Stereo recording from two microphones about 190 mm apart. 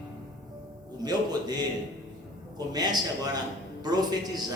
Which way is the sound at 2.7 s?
20° right (ahead or behind).